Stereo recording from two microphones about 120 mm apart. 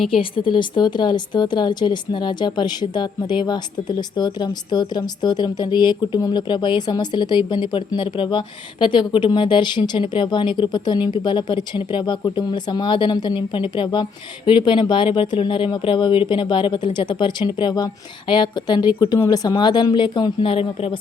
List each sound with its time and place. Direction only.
0.1 s a woman's voice: 45° left (ahead or behind)